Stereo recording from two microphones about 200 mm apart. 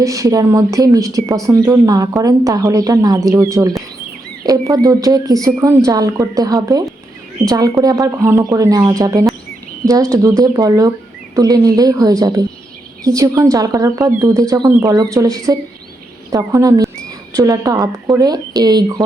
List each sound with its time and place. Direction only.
0.0 s speech: 15° right (ahead or behind)